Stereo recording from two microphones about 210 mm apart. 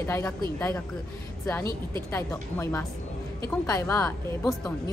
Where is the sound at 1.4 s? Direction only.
10° left (ahead or behind).